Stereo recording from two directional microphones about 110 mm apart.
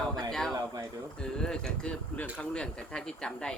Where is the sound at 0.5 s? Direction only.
35° right (ahead or behind).